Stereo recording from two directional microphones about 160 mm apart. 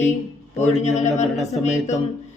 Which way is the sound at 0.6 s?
45° left (ahead or behind).